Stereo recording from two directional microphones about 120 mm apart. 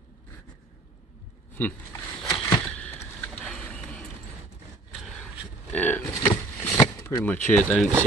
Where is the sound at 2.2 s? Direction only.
5° left (ahead or behind).